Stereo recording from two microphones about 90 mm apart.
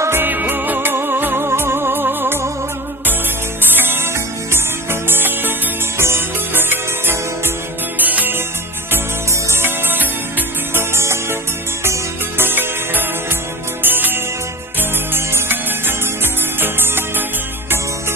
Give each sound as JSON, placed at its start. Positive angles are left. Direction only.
{"t": 0.0, "sound": "music", "side_deg": -25}
{"t": 3.7, "sound": "music", "side_deg": -25}
{"t": 9.5, "sound": "music", "side_deg": -25}